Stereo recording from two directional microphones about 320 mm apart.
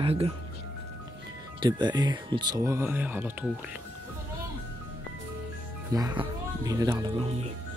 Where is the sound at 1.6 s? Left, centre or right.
Centre.